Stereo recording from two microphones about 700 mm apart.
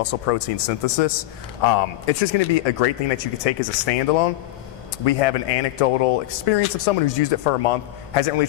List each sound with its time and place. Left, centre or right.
0.0 s a man's voice: left